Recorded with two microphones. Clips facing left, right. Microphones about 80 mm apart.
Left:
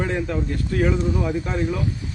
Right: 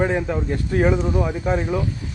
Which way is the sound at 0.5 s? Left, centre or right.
Right.